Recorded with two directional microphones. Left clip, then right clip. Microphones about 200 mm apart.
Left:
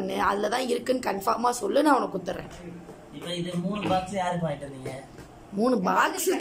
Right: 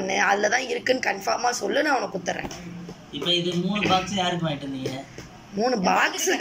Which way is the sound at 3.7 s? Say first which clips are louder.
Right 4 dB; 20° left (ahead or behind).